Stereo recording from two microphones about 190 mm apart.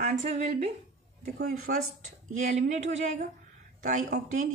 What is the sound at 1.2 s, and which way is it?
Speech, 45° right (ahead or behind).